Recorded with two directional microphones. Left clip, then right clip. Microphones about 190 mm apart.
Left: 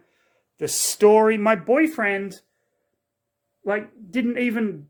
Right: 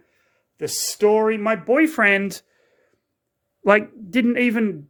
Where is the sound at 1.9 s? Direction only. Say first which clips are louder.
Right 6 dB; 35° right (ahead or behind).